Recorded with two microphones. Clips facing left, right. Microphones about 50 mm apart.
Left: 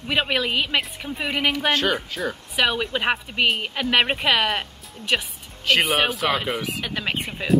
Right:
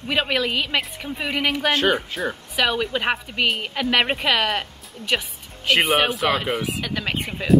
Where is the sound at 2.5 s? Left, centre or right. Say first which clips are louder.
Even; centre.